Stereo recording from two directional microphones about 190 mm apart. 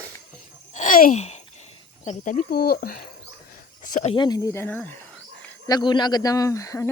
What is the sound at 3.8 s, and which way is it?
Speech, 40° left (ahead or behind).